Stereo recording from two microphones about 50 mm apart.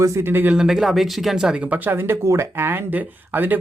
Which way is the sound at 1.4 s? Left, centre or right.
Right.